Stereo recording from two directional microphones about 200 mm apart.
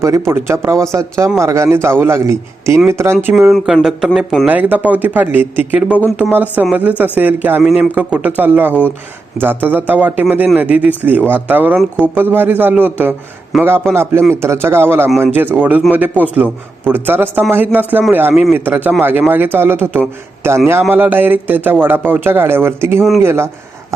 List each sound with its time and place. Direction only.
0.3 s a man's voice: 10° right (ahead or behind)
3.2 s a man's voice: 5° right (ahead or behind)